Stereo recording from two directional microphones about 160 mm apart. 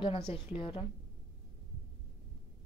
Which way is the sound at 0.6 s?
35° left (ahead or behind).